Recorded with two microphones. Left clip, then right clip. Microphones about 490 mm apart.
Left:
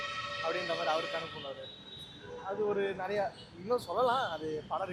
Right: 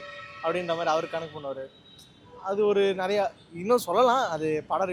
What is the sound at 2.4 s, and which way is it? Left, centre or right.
Speech, right.